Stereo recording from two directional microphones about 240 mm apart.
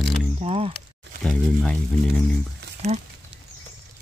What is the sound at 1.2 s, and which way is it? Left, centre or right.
Speech, centre.